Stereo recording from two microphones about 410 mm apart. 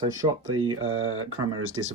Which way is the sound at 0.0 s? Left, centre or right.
Centre.